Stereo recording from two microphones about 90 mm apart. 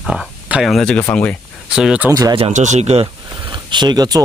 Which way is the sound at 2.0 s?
40° right (ahead or behind).